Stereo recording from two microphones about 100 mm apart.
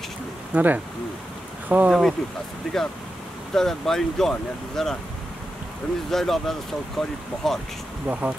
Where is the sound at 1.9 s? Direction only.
Centre (ahead or behind).